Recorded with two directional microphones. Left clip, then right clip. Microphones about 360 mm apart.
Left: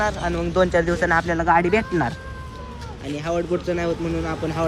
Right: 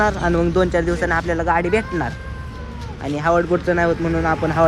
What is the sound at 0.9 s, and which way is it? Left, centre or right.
Speech, centre.